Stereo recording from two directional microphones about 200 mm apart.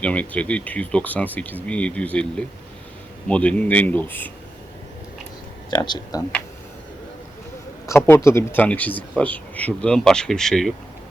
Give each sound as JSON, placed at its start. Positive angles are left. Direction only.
{"t": 0.0, "sound": "speech", "side_deg": 5}
{"t": 5.7, "sound": "speech", "side_deg": 20}
{"t": 7.9, "sound": "speech", "side_deg": 10}